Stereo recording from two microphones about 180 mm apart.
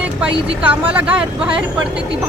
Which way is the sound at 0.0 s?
5° right (ahead or behind).